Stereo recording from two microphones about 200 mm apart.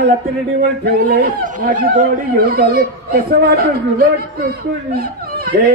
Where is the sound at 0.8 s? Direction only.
55° right (ahead or behind).